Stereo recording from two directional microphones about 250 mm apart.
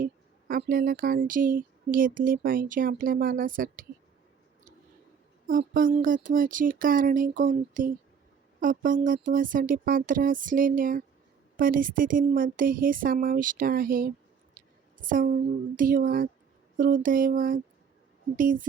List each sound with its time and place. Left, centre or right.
0.0 s speech: right
5.5 s speech: right
14.6 s a sound: right
14.9 s speech: right